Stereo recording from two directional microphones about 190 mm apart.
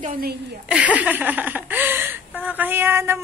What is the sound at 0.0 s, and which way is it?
Speech, 50° right (ahead or behind).